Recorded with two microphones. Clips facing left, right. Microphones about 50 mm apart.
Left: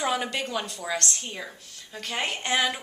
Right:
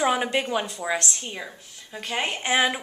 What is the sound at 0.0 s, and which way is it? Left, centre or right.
A woman's voice, right.